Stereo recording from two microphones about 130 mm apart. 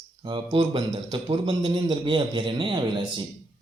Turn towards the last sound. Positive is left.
turn(degrees=-35)  # may be behind; listen again after turning